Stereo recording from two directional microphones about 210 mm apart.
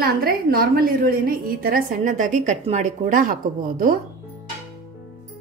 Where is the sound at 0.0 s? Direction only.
45° right (ahead or behind).